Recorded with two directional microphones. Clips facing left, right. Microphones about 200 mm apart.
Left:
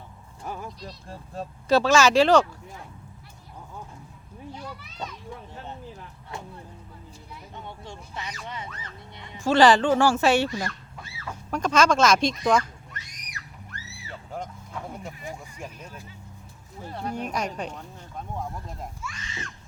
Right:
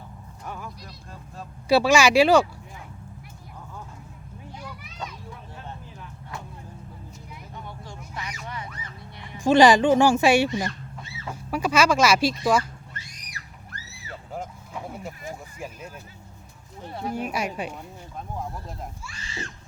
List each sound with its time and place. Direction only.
1.6 s speech: 10° right (ahead or behind)
7.5 s a sound: 25° left (ahead or behind)
9.4 s speech: 15° right (ahead or behind)
11.3 s speech: 10° right (ahead or behind)
12.9 s a sound: 35° right (ahead or behind)
14.3 s sheep: 5° right (ahead or behind)
15.5 s speech: 5° right (ahead or behind)
16.9 s speech: 5° right (ahead or behind)
19.0 s speech: 30° right (ahead or behind)